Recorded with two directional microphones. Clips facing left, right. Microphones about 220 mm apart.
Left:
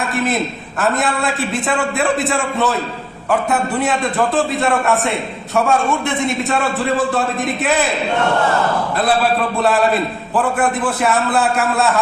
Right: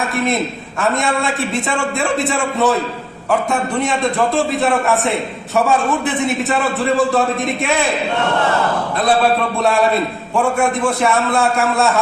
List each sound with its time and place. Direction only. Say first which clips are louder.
0.8 s a man's voice: even; centre (ahead or behind)
6.5 s a man's voice: right 1 dB; centre (ahead or behind)
9.6 s a man's voice: right 1 dB; centre (ahead or behind)